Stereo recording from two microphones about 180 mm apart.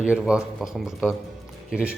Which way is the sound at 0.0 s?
5° right (ahead or behind).